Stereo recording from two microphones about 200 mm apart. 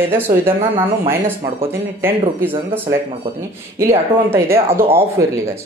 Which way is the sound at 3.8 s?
15° right (ahead or behind).